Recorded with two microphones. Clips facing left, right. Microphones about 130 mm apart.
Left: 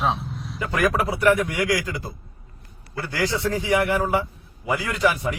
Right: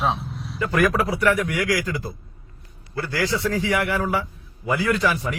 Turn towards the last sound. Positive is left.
turn(degrees=20)  # may be behind; listen again after turning